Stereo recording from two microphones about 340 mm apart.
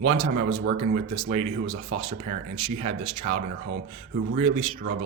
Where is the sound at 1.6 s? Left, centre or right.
Right.